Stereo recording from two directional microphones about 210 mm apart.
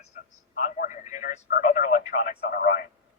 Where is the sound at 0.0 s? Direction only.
35° left (ahead or behind).